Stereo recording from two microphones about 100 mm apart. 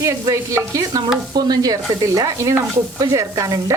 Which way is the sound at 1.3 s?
45° right (ahead or behind).